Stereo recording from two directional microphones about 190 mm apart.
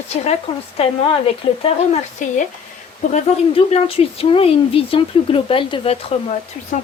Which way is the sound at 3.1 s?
30° left (ahead or behind).